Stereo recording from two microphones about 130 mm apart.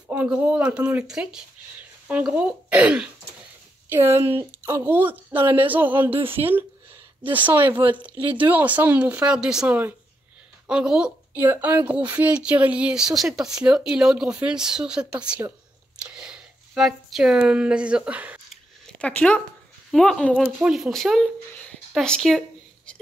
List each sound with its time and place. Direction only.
0.1 s speech: 10° right (ahead or behind)
5.4 s speech: 40° right (ahead or behind)
5.7 s speech: 15° right (ahead or behind)
16.0 s a sound: 5° right (ahead or behind)
17.4 s speech: 10° right (ahead or behind)
18.5 s a sound: 10° left (ahead or behind)
19.9 s speech: 5° left (ahead or behind)